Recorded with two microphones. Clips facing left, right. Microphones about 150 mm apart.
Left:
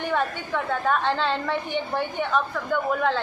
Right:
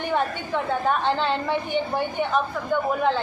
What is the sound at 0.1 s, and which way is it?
A woman's voice, 20° right (ahead or behind).